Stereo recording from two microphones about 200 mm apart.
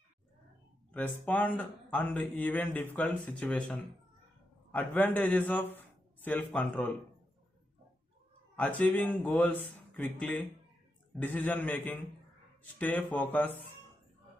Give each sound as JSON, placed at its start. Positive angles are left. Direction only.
{"t": 0.9, "sound": "speech", "side_deg": 5}
{"t": 8.5, "sound": "speech", "side_deg": 5}